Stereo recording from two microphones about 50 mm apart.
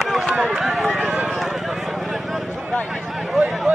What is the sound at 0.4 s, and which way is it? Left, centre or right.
Run, centre.